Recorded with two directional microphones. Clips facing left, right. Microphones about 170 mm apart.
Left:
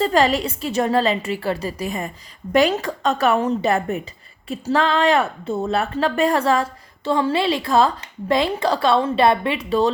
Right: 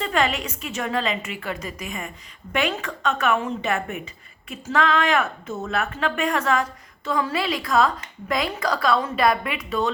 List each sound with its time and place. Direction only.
0.0 s a woman's voice: 35° left (ahead or behind)